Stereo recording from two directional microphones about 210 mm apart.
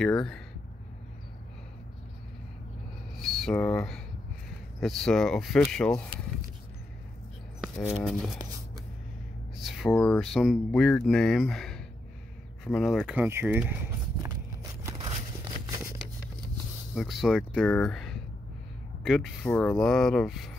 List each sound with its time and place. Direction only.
0.0 s speech: 5° left (ahead or behind)
3.2 s speech: centre (ahead or behind)
7.9 s speech: centre (ahead or behind)
9.7 s speech: centre (ahead or behind)
14.9 s a sound: 25° right (ahead or behind)
15.7 s a sound: 15° right (ahead or behind)
16.9 s speech: centre (ahead or behind)